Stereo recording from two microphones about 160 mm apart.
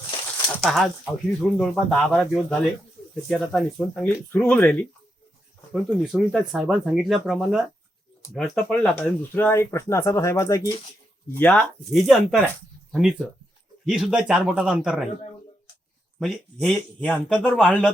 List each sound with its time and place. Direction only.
0.4 s a sound: 5° left (ahead or behind)
1.4 s speech: centre (ahead or behind)
5.7 s speech: 5° right (ahead or behind); by 10.8 s 20° left (ahead or behind)
11.3 s speech: 10° left (ahead or behind)
16.2 s speech: centre (ahead or behind)